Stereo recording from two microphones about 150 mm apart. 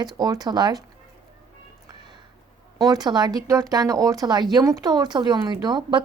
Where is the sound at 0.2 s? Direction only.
25° right (ahead or behind).